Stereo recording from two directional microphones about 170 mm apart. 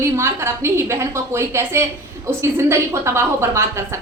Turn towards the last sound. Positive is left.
turn(degrees=-15)  # may be behind; listen again after turning